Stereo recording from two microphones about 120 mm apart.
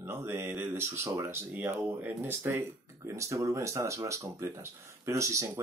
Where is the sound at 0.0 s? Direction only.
20° right (ahead or behind).